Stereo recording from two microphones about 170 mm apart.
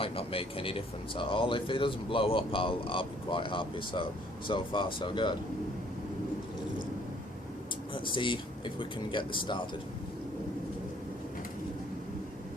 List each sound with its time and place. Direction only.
0.0 s speech: 35° left (ahead or behind)
7.9 s speech: 30° left (ahead or behind)